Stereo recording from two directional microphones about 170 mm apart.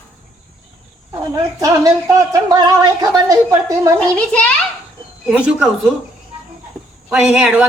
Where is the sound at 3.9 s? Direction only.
5° left (ahead or behind).